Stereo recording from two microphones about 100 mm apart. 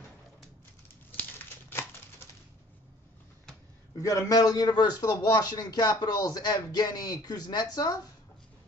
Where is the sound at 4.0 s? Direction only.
35° left (ahead or behind).